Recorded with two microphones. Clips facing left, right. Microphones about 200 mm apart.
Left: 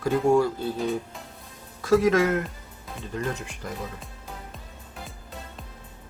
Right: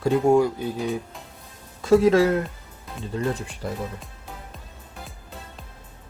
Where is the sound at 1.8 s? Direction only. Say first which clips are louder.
Right 3 dB; 30° right (ahead or behind).